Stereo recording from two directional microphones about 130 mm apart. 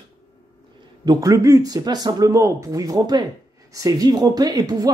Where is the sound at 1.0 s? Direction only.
25° right (ahead or behind).